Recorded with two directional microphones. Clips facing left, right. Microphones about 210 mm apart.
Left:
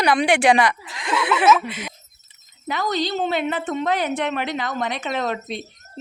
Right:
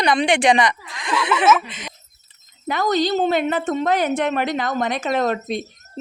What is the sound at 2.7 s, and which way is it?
Speech, 45° right (ahead or behind).